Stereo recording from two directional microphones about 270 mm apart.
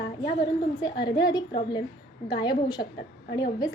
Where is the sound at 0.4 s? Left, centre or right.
Centre.